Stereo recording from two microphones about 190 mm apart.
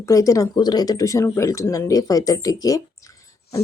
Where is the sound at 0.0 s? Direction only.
15° left (ahead or behind).